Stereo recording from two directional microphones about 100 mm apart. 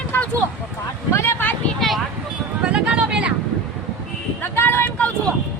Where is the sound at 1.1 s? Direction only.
25° left (ahead or behind).